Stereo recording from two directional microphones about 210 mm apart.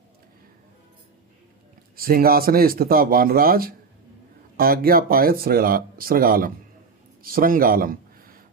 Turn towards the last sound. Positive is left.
turn(degrees=-45)  # may be behind; listen again after turning